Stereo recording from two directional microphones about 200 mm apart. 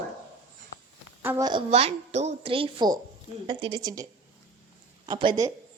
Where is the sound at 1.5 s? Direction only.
25° right (ahead or behind).